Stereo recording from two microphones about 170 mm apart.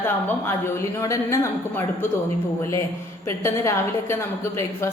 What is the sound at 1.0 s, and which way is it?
Speech, 20° left (ahead or behind).